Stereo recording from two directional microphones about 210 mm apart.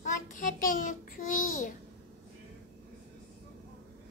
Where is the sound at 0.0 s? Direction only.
40° left (ahead or behind).